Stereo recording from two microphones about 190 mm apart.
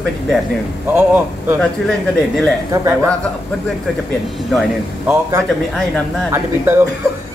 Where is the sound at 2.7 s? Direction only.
15° right (ahead or behind).